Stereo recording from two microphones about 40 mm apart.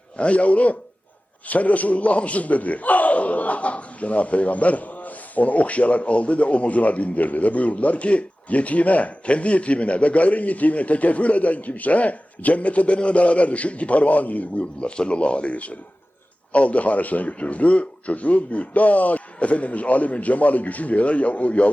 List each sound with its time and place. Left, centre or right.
0.2 s a man's voice: left
14.8 s a man's voice: left